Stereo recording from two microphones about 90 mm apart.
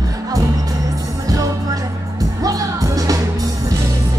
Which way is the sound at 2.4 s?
40° right (ahead or behind).